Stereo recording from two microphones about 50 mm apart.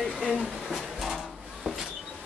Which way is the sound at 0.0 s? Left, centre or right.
Centre.